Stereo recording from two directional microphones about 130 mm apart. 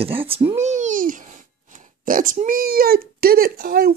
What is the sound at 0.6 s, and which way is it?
Babbling, 65° right (ahead or behind).